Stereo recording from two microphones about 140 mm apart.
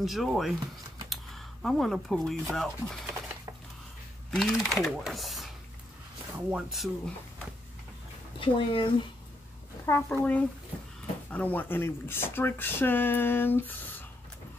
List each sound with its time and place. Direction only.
0.0 s speech: centre (ahead or behind)
1.1 s a sound: centre (ahead or behind)
2.5 s speech: 5° left (ahead or behind)
4.3 s speech: centre (ahead or behind)
8.4 s speech: 40° left (ahead or behind)
9.8 s speech: 15° left (ahead or behind)